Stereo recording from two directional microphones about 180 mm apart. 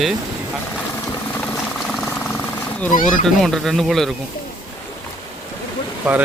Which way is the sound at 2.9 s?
45° left (ahead or behind).